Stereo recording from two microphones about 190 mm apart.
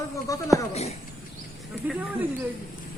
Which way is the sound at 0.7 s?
35° left (ahead or behind).